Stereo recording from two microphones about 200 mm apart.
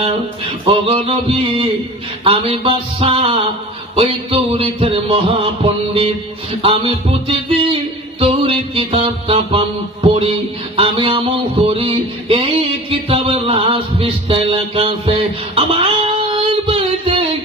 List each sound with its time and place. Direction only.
0.7 s music: 30° right (ahead or behind)